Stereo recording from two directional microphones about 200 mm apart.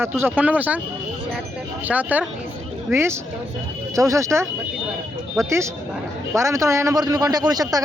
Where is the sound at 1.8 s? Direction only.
5° right (ahead or behind).